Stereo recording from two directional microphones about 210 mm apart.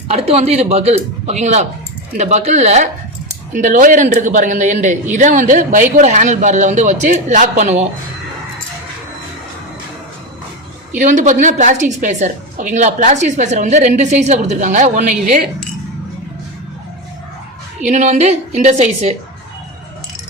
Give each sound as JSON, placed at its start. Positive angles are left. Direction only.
{"t": 0.1, "sound": "a woman's voice", "side_deg": -30}
{"t": 10.9, "sound": "a woman's voice", "side_deg": -35}
{"t": 17.9, "sound": "a woman's voice", "side_deg": -35}